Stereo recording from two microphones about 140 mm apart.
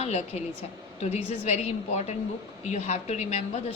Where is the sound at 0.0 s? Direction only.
50° left (ahead or behind).